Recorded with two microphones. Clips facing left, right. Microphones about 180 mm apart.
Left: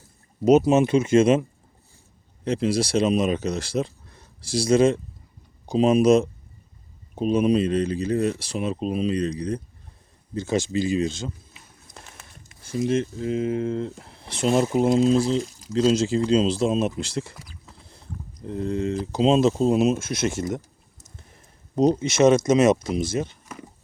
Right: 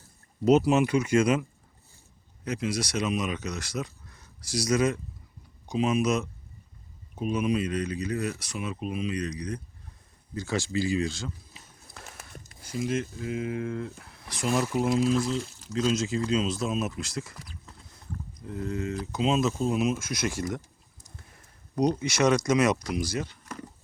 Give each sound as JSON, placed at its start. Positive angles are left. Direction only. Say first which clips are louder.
{"t": 0.4, "sound": "speech", "louder": "left 4 dB", "side_deg": 20}
{"t": 12.6, "sound": "speech", "louder": "left 6 dB", "side_deg": 25}
{"t": 18.4, "sound": "speech", "louder": "left 6 dB", "side_deg": 30}
{"t": 21.8, "sound": "speech", "louder": "left 6 dB", "side_deg": 25}